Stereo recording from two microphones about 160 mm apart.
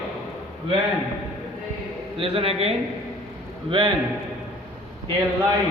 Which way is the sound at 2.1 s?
35° right (ahead or behind).